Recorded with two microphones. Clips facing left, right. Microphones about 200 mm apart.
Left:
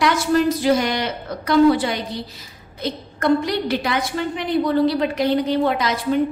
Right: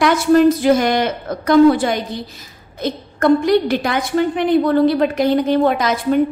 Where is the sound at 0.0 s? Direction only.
55° right (ahead or behind).